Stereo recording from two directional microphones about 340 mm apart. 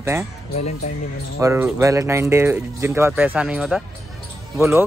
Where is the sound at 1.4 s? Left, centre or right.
Centre.